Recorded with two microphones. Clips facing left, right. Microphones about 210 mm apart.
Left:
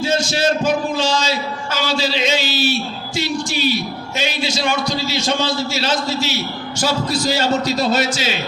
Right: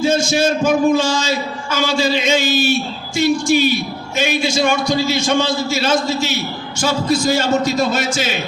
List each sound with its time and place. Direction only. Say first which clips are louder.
0.0 s a man's voice: right 3 dB; 50° right (ahead or behind)